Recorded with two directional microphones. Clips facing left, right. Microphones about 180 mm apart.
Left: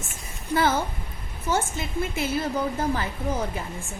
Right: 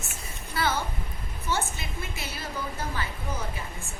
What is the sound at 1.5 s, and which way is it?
Speech, 50° left (ahead or behind).